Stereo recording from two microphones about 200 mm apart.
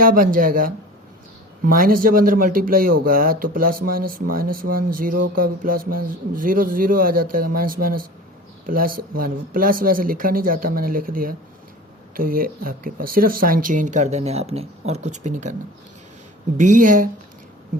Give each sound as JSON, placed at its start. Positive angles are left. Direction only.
{"t": 0.0, "sound": "speech", "side_deg": -45}
{"t": 16.6, "sound": "speech", "side_deg": -40}